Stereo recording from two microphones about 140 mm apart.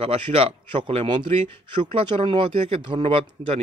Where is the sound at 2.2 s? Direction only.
40° right (ahead or behind).